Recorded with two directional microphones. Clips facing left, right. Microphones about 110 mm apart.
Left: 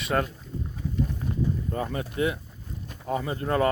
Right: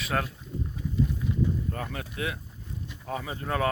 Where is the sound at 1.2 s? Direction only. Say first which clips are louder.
Right 1 dB; 45° left (ahead or behind).